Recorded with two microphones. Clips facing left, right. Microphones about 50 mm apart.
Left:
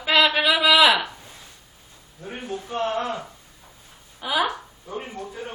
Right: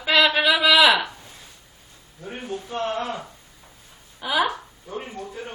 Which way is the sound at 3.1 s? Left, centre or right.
Centre.